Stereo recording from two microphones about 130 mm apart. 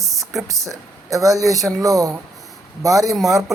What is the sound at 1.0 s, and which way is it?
Speech, 25° right (ahead or behind).